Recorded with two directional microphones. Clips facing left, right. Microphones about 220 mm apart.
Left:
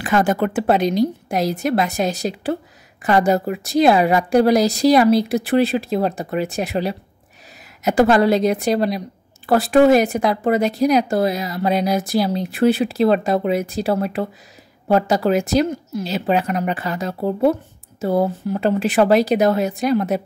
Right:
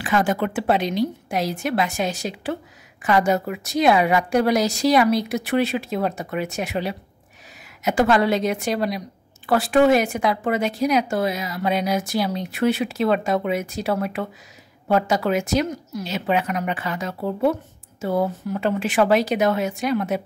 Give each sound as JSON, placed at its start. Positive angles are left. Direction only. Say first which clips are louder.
{"t": 0.0, "sound": "speech", "louder": "left 3 dB", "side_deg": 45}